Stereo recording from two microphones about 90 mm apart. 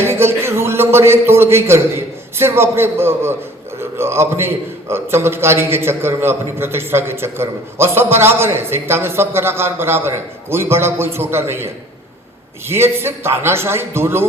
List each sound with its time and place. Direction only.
0.0 s a man's voice: 25° right (ahead or behind)